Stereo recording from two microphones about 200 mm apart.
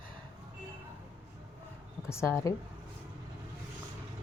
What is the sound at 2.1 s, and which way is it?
Speech, 15° left (ahead or behind).